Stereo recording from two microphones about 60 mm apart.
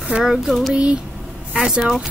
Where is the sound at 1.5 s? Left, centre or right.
Centre.